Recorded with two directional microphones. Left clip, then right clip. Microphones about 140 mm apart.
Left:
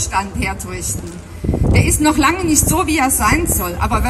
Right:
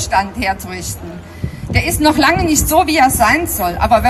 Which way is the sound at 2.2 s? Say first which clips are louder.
Right 2 dB; 35° right (ahead or behind).